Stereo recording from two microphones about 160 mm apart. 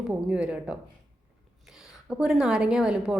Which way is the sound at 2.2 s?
5° right (ahead or behind).